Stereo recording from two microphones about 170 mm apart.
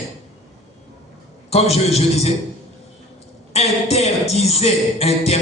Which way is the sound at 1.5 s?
35° left (ahead or behind).